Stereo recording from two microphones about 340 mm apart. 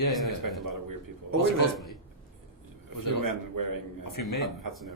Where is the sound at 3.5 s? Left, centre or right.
Right.